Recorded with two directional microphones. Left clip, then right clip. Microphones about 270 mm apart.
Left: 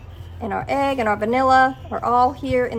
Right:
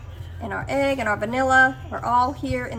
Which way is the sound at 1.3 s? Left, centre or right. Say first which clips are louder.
Left 2 dB; left.